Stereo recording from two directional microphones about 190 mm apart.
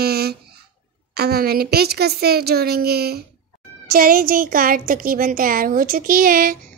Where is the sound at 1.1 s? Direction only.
55° right (ahead or behind).